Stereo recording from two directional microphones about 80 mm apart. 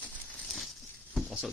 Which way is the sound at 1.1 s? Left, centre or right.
Centre.